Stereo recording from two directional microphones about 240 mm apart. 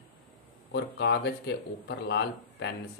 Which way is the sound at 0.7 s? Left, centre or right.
Left.